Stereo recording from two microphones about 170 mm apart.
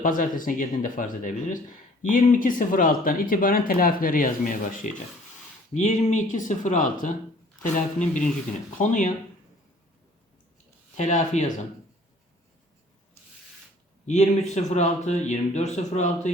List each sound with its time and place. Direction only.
0.0 s speech: 50° left (ahead or behind)
10.9 s speech: 45° left (ahead or behind)
14.1 s speech: 40° left (ahead or behind)